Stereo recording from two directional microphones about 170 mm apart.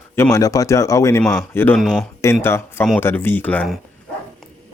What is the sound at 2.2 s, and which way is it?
Speech, 15° left (ahead or behind).